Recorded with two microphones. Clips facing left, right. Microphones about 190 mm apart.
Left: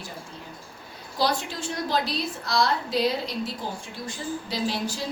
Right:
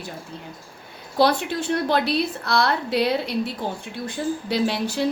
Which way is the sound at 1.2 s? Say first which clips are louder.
Right 6 dB; 60° right (ahead or behind).